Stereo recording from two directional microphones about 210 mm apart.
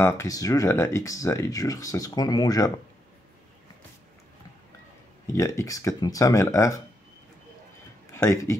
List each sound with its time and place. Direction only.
0.0 s speech: 15° left (ahead or behind)
5.2 s speech: 15° left (ahead or behind)
8.1 s speech: 15° left (ahead or behind)